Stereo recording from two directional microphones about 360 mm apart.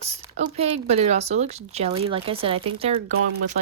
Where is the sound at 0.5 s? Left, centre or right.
Centre.